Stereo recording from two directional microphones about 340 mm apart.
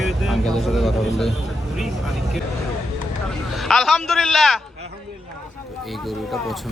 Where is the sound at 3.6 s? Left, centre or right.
Centre.